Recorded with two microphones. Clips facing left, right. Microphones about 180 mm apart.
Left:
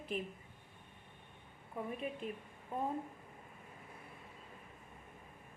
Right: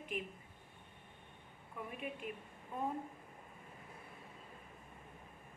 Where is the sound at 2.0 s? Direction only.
30° left (ahead or behind).